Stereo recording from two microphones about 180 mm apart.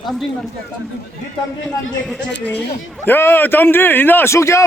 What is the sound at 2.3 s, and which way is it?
A man's voice, 10° left (ahead or behind).